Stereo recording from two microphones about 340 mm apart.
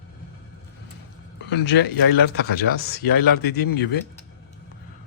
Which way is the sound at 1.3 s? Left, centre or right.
Left.